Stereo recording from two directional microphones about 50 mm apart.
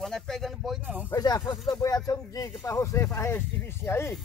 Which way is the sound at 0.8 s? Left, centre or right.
Right.